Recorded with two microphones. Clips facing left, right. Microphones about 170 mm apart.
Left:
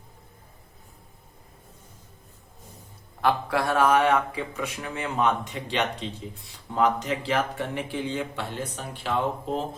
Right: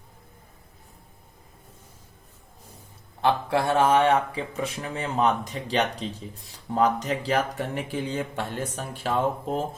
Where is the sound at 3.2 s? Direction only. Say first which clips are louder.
Right 1 dB; 25° right (ahead or behind); by 8.9 s 45° right (ahead or behind).